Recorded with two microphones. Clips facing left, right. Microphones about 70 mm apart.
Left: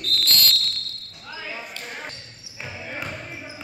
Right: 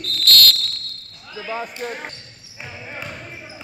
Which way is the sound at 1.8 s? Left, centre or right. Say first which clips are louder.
Right 9 dB; right.